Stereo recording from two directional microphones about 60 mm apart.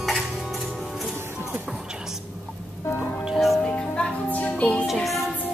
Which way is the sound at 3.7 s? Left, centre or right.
Left.